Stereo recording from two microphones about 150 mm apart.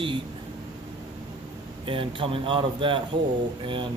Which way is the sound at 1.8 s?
35° right (ahead or behind).